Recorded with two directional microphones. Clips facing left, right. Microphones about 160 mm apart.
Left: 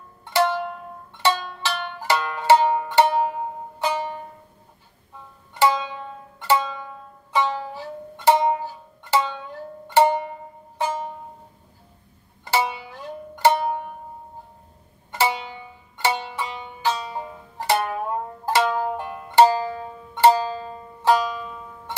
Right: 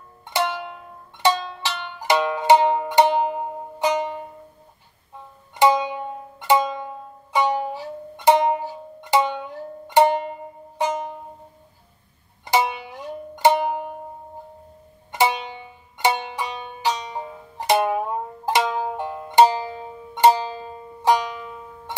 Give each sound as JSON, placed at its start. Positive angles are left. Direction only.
{"t": 1.1, "sound": "music", "side_deg": -15}
{"t": 5.6, "sound": "music", "side_deg": -15}
{"t": 12.4, "sound": "music", "side_deg": -20}
{"t": 15.0, "sound": "music", "side_deg": -20}